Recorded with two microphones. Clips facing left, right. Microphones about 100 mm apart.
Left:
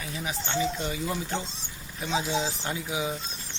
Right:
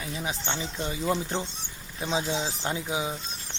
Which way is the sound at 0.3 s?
25° right (ahead or behind).